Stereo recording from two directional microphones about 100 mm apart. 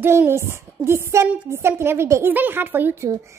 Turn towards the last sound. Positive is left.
turn(degrees=-20)  # may be behind; listen again after turning